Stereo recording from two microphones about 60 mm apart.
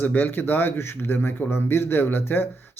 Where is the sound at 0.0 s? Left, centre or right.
Left.